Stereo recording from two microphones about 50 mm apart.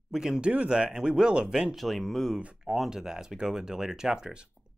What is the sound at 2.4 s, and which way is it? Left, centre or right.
Speech, right.